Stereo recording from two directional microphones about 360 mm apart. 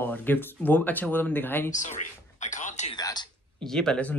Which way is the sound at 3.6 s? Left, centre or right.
Centre.